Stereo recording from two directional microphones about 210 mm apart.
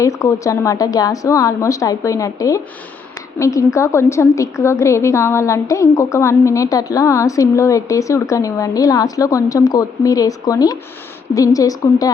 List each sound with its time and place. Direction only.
0.0 s a woman's voice: 15° left (ahead or behind)